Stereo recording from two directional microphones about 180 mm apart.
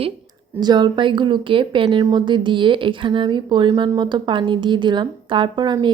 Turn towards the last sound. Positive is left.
turn(degrees=-25)  # may be behind; listen again after turning